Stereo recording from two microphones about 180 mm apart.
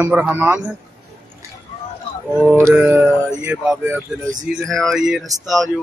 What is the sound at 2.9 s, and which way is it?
Speech, 10° right (ahead or behind).